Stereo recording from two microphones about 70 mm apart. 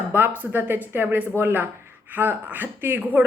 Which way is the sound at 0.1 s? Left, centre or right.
Right.